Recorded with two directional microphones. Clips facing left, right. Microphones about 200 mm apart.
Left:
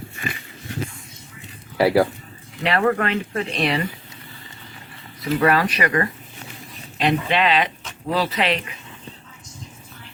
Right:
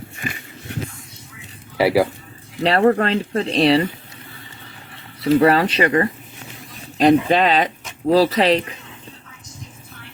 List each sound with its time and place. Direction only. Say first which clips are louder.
1.8 s speech: right 1 dB; centre (ahead or behind)
2.6 s speech: right 4 dB; 35° right (ahead or behind)
5.2 s speech: right 5 dB; 30° right (ahead or behind)
7.0 s speech: right 6 dB; 40° right (ahead or behind)